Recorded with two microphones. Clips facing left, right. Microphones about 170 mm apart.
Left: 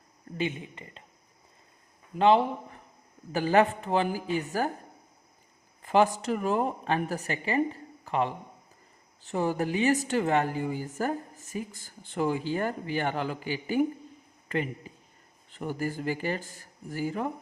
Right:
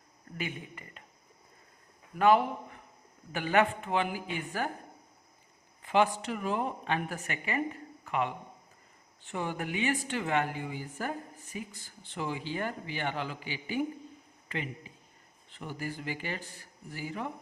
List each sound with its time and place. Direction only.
0.3 s speech: 25° left (ahead or behind)
2.1 s speech: 25° left (ahead or behind)
5.8 s speech: 40° left (ahead or behind)